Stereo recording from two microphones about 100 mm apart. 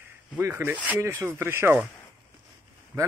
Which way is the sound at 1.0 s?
25° right (ahead or behind).